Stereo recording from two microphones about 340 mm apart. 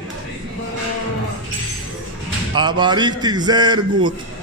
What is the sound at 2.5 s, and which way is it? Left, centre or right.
Speech, centre.